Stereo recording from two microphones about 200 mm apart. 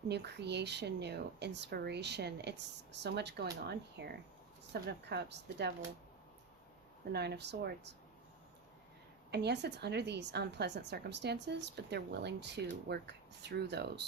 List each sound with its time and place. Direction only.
0.1 s speech: 55° right (ahead or behind)
7.1 s speech: 55° right (ahead or behind)
9.3 s speech: 55° right (ahead or behind)